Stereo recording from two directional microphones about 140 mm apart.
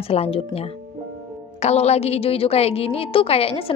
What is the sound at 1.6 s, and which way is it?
A woman's voice, 50° left (ahead or behind).